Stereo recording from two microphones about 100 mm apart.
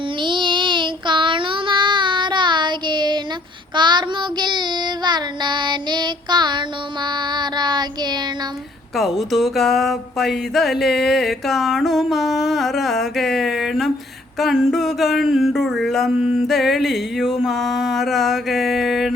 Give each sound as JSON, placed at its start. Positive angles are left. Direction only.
{"t": 0.2, "sound": "child singing", "side_deg": -55}
{"t": 9.0, "sound": "music", "side_deg": 0}